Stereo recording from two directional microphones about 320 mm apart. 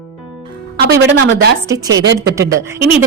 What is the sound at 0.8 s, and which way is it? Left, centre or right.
Speech, right.